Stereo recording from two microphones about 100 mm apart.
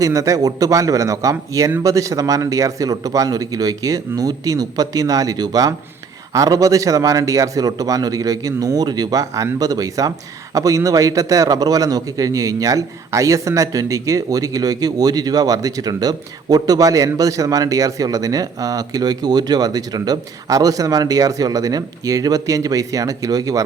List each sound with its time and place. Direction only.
0.0 s a man's voice: 35° right (ahead or behind)